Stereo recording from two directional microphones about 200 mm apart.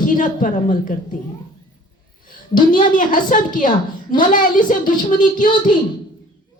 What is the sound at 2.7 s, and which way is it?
A woman's voice, 40° left (ahead or behind).